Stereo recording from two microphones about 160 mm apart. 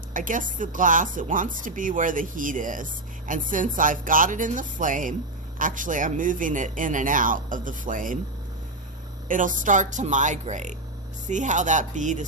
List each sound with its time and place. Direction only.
0.1 s speech: 55° right (ahead or behind)
9.3 s speech: 55° right (ahead or behind)